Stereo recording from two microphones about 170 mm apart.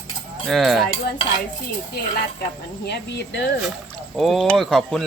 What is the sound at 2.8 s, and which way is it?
Speech, 85° left.